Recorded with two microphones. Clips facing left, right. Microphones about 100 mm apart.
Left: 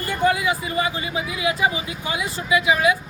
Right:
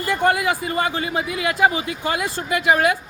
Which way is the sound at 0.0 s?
75° right (ahead or behind).